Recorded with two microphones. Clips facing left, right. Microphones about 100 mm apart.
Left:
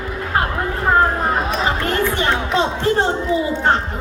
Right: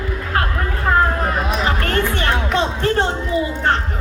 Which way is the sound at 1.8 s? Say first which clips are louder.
Left 1 dB; 20° left (ahead or behind).